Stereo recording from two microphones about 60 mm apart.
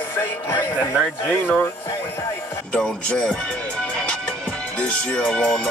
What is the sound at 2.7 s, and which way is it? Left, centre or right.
Speech, centre.